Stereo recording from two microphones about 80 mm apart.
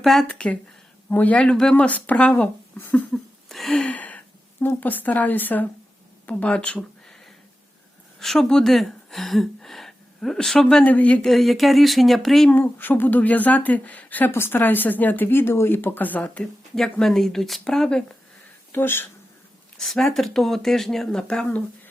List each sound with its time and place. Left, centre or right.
0.0 s speech: centre
0.3 s speech: centre
1.7 s speech: centre
3.1 s a sound: centre
3.8 s gasp: centre
4.6 s speech: left
8.2 s speech: centre
10.8 s speech: centre
11.3 s speech: centre
12.5 s speech: left
16.7 s speech: centre
18.7 s speech: left
19.7 s speech: centre